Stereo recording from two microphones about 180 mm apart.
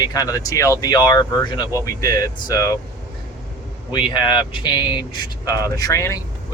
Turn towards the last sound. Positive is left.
turn(degrees=15)  # may be behind; listen again after turning